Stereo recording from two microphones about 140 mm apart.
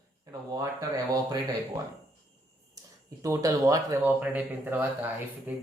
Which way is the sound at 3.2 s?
25° right (ahead or behind).